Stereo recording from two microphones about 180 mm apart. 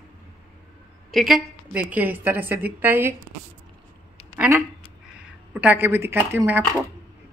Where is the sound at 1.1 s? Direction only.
Centre (ahead or behind).